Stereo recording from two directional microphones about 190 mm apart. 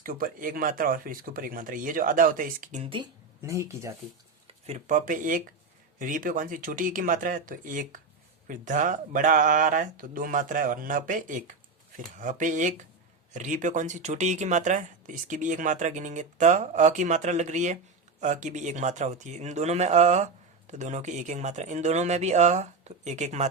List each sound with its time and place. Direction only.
0.0 s speech: 50° right (ahead or behind)
2.8 s speech: 25° right (ahead or behind)
3.4 s speech: 15° right (ahead or behind)
4.4 s speech: 35° right (ahead or behind)